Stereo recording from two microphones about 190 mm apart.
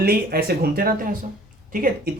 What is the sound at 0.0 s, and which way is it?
Speech, 55° right (ahead or behind).